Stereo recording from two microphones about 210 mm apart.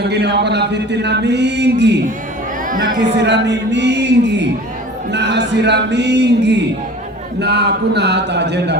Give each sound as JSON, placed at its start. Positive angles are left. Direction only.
{"t": 0.0, "sound": "a man's voice", "side_deg": -50}
{"t": 2.6, "sound": "speech", "side_deg": -40}
{"t": 3.2, "sound": "a man's voice", "side_deg": -55}